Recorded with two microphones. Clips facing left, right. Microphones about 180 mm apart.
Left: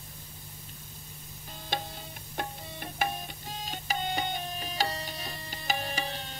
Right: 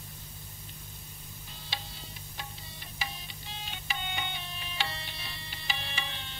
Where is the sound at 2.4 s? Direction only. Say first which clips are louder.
Left 11 dB; 55° left (ahead or behind).